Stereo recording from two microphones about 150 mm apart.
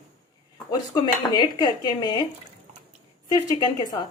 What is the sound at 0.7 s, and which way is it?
A woman's voice, 30° left (ahead or behind).